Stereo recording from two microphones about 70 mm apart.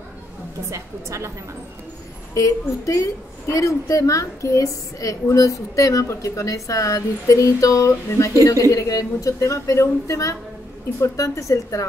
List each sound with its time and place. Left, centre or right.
0.7 s a woman's voice: right
2.3 s a woman's voice: left